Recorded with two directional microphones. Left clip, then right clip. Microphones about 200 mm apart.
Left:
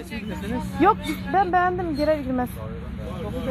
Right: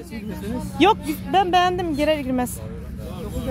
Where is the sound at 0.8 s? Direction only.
40° right (ahead or behind).